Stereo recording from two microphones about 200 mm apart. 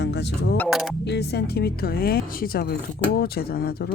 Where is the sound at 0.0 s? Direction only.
60° left (ahead or behind).